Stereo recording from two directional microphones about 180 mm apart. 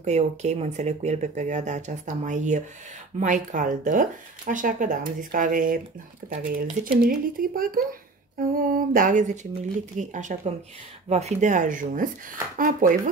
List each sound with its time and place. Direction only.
0.0 s speech: 40° right (ahead or behind)